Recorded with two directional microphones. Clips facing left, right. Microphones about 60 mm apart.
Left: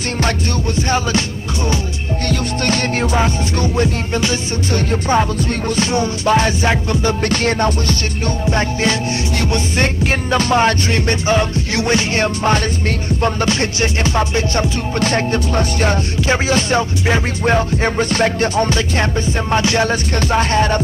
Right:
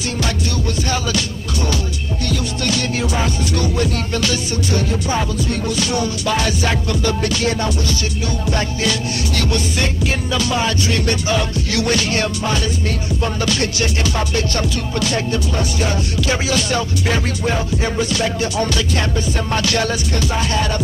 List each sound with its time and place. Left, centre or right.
0.7 s music: left
2.2 s music: left
4.7 s music: left
8.5 s music: left
10.3 s music: left
11.0 s music: left
15.0 s music: left
16.2 s music: left
17.5 s music: left
20.2 s music: left